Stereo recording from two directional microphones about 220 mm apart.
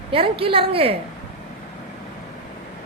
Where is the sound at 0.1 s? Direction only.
25° right (ahead or behind).